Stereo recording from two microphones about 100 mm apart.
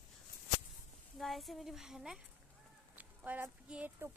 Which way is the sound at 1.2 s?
Centre (ahead or behind).